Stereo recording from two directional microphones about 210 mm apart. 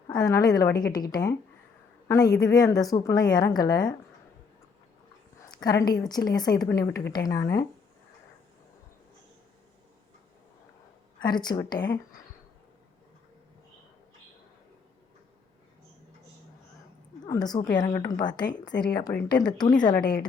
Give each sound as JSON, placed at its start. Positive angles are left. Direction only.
{"t": 0.1, "sound": "a woman's voice", "side_deg": 15}
{"t": 5.4, "sound": "a woman's voice", "side_deg": 15}
{"t": 11.2, "sound": "a woman's voice", "side_deg": 20}
{"t": 17.2, "sound": "a woman's voice", "side_deg": 15}